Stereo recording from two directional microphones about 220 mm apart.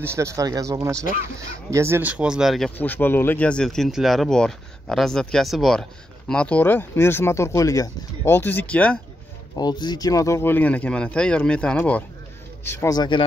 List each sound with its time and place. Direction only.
0.0 s speech: 10° right (ahead or behind); by 9.0 s 5° left (ahead or behind)
9.6 s speech: 20° left (ahead or behind)